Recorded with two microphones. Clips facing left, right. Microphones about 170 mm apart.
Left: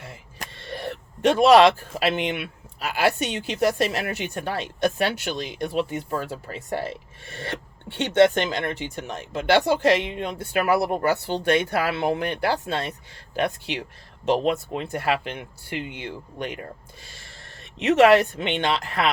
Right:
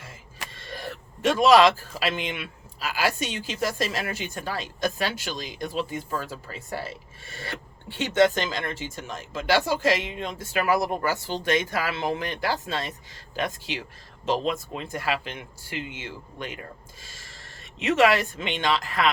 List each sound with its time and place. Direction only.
0.3 s speech: 65° left (ahead or behind)